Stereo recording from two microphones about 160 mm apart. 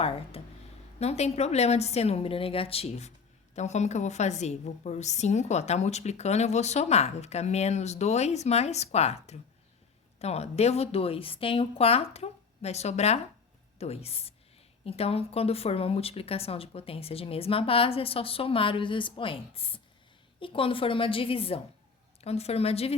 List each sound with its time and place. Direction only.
0.0 s a woman's voice: 40° left (ahead or behind)